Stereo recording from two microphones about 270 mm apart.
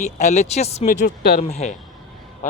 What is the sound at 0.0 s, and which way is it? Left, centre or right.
A man's voice, left.